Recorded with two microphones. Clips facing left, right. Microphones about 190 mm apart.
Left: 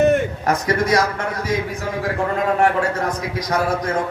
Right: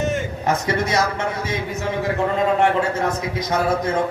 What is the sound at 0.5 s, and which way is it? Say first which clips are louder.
Speech: left 3 dB; 25° right (ahead or behind).